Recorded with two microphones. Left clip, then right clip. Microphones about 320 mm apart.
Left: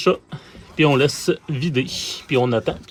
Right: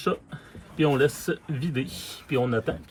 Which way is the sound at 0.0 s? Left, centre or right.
Centre.